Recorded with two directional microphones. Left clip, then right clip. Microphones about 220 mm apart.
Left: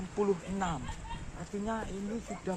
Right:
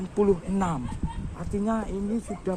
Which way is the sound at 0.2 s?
50° right (ahead or behind).